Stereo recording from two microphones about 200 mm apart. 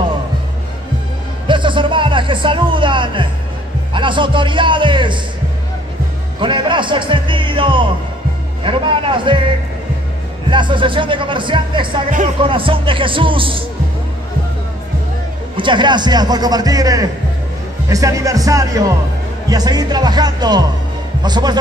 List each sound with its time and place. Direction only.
1.5 s music: 25° right (ahead or behind)
3.9 s a man's voice: 25° right (ahead or behind)
6.4 s a man's voice: 25° right (ahead or behind)
10.5 s a man's voice: 25° right (ahead or behind)
15.5 s a man's voice: 25° right (ahead or behind)